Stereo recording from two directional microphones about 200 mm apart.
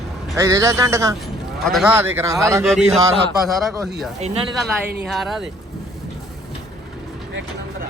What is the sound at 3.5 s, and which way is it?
Speech, centre (ahead or behind).